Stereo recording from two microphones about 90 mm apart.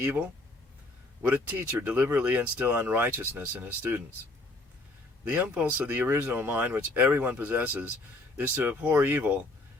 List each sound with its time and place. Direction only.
1.3 s speech: 20° right (ahead or behind)
5.3 s speech: 15° right (ahead or behind)